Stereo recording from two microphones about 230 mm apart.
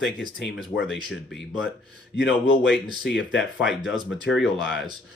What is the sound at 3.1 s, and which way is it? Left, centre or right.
Speech, left.